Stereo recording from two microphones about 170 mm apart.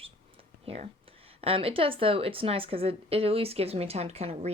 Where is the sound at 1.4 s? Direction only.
35° right (ahead or behind).